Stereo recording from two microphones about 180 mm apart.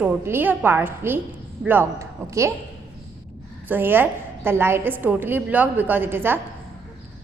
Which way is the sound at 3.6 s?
10° right (ahead or behind).